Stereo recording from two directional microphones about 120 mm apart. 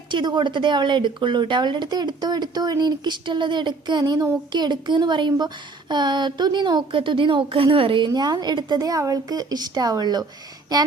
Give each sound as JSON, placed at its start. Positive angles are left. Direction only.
{"t": 0.1, "sound": "a woman's voice", "side_deg": -40}